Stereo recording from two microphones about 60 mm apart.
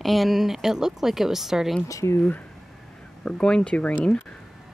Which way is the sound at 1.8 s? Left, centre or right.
Left.